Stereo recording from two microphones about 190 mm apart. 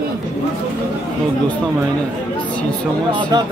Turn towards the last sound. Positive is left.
turn(degrees=-20)  # may be behind; listen again after turning